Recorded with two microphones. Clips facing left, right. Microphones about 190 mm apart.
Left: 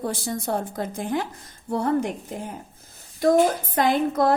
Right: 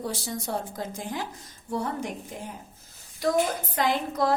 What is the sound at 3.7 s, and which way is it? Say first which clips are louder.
Speech: left 5 dB; 55° left (ahead or behind).